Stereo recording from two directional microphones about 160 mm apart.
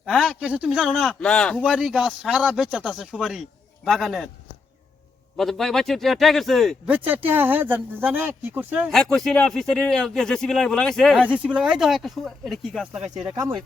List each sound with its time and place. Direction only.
0.0 s speech: centre (ahead or behind)
1.6 s speech: 5° right (ahead or behind)
5.4 s speech: centre (ahead or behind)
6.9 s speech: 10° right (ahead or behind)
8.9 s speech: 5° left (ahead or behind)
11.3 s speech: 5° right (ahead or behind)
13.3 s speech: 25° right (ahead or behind)